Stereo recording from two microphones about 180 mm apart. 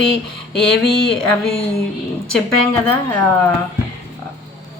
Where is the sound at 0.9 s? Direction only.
5° left (ahead or behind).